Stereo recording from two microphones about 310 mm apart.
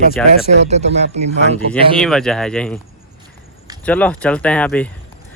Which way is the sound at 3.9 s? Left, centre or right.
Centre.